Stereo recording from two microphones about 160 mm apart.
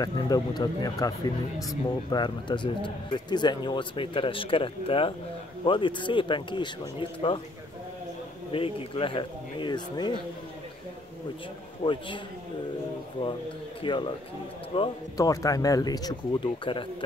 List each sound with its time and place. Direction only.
0.0 s speech: 25° left (ahead or behind)
8.5 s speech: 35° left (ahead or behind)
11.8 s speech: 30° left (ahead or behind)
13.8 s speech: 30° left (ahead or behind)
15.1 s speech: 20° left (ahead or behind)